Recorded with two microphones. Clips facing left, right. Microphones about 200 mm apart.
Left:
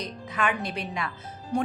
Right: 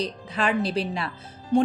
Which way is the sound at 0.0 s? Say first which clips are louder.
Right 3 dB; 30° right (ahead or behind).